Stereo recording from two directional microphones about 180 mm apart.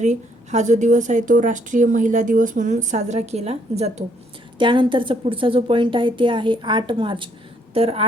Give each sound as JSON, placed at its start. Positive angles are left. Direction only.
{"t": 0.0, "sound": "a woman's voice", "side_deg": -40}